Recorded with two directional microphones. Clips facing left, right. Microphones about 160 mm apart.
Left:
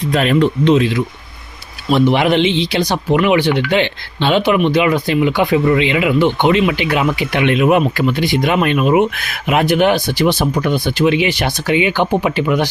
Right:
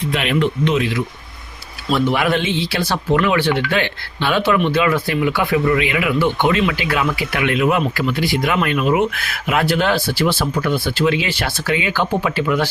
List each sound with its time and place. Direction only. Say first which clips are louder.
0.1 s speech: left 6 dB; 40° left (ahead or behind)
1.9 s speech: left 4 dB; 20° left (ahead or behind)